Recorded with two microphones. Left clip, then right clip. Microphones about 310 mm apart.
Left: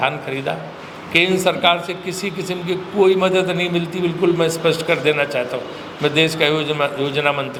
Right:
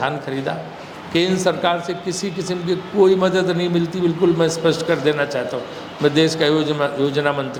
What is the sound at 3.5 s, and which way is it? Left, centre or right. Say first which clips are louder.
Speech: left 1 dB; centre.